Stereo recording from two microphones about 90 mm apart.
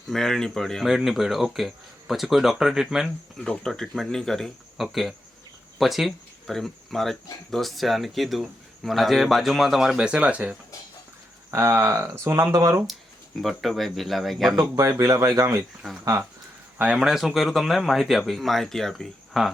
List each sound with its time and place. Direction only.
0.1 s speech: 5° left (ahead or behind); by 10.6 s 15° right (ahead or behind)
11.5 s speech: 30° right (ahead or behind)
13.4 s speech: centre (ahead or behind)
14.8 s speech: 40° right (ahead or behind)
16.7 s speech: 15° right (ahead or behind)